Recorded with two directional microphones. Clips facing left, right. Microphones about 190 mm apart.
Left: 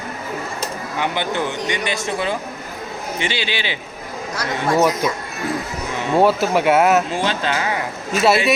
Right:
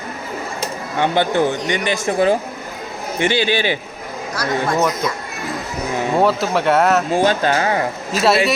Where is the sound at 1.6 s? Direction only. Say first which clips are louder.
Right 3 dB; 15° left (ahead or behind).